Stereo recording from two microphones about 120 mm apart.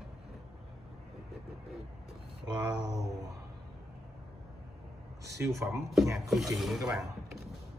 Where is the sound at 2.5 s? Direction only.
30° right (ahead or behind).